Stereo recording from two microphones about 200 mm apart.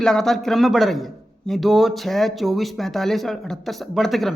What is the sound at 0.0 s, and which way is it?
A man's voice, centre (ahead or behind).